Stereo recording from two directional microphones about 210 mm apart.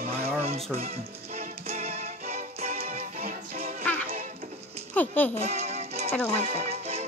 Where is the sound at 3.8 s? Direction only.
5° left (ahead or behind).